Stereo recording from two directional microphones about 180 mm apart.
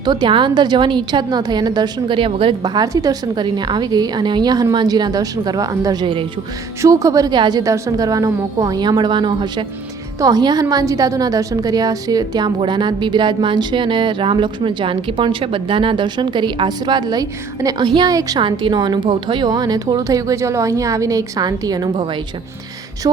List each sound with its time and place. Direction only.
0.0 s a woman's voice: 25° right (ahead or behind)